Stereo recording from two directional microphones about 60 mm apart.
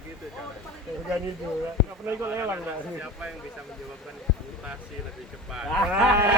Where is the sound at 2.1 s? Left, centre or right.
Right.